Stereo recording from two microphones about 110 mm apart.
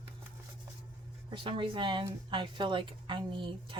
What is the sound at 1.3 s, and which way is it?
A woman's voice, 50° right (ahead or behind).